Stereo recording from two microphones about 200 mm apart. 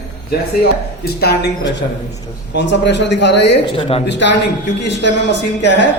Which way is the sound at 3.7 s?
25° left (ahead or behind).